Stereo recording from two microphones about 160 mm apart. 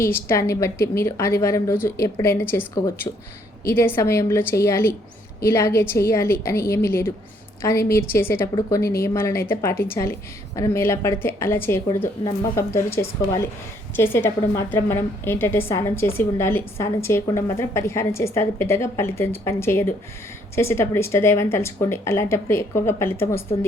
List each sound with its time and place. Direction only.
0.0 s a woman's voice: 15° left (ahead or behind)
3.7 s a woman's voice: 15° left (ahead or behind)